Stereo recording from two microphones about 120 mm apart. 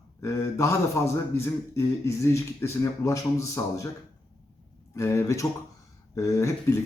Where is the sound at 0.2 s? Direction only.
25° left (ahead or behind).